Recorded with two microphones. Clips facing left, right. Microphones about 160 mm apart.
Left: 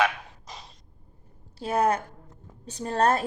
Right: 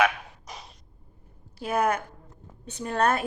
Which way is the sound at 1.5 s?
30° left (ahead or behind).